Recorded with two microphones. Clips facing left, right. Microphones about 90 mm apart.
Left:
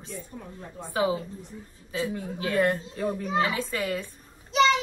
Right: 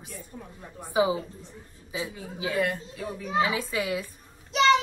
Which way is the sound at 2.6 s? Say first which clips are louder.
Left 4 dB; 50° left (ahead or behind).